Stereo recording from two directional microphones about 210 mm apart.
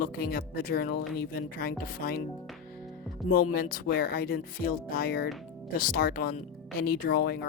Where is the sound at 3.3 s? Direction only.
45° left (ahead or behind).